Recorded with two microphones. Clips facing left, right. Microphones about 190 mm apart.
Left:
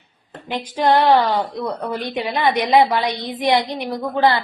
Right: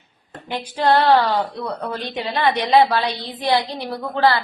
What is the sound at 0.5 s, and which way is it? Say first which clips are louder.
A woman's voice: left 1 dB; 15° left (ahead or behind).